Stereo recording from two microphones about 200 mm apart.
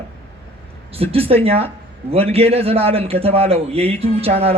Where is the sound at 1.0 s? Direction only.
30° right (ahead or behind).